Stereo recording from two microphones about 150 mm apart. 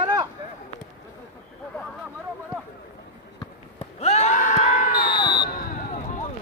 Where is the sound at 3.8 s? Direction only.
45° left (ahead or behind).